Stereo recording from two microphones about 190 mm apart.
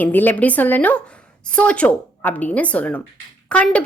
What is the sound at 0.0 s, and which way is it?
A woman's voice, 10° left (ahead or behind).